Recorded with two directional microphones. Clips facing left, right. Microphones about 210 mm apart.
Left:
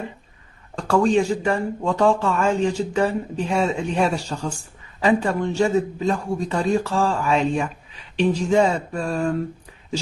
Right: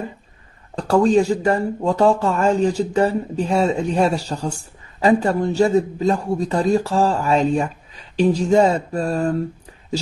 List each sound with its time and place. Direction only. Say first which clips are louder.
0.7 s speech: right 3 dB; 40° right (ahead or behind)